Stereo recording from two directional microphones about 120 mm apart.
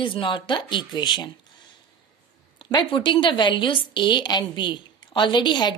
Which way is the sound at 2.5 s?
45° left (ahead or behind).